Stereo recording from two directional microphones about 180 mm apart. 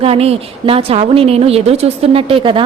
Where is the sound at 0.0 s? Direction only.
35° right (ahead or behind).